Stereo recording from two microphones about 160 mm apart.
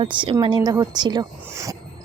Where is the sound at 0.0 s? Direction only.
30° right (ahead or behind).